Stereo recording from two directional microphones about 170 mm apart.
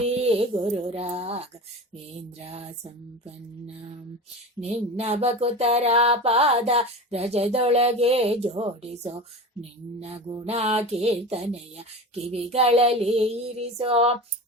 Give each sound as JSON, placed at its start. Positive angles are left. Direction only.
{"t": 0.0, "sound": "a sound", "side_deg": -35}
{"t": 2.4, "sound": "music", "side_deg": -40}
{"t": 4.6, "sound": "music", "side_deg": -40}